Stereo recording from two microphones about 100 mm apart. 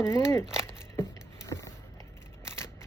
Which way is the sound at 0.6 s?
30° left (ahead or behind).